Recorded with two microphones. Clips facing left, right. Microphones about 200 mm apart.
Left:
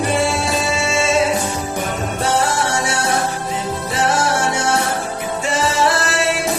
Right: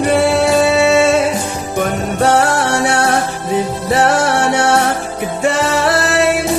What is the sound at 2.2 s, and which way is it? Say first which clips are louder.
Music: right 6 dB; 65° right (ahead or behind).